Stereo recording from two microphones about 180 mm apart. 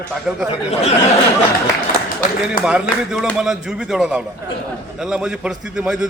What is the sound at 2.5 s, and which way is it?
A man's voice, 5° right (ahead or behind).